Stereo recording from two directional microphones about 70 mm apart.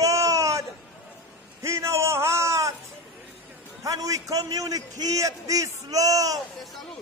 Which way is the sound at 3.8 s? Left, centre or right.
Right.